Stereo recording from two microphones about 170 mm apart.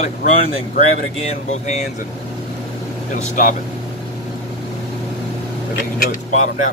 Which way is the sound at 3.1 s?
50° left (ahead or behind).